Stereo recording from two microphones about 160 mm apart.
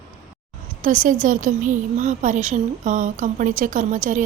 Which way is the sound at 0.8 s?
55° right (ahead or behind).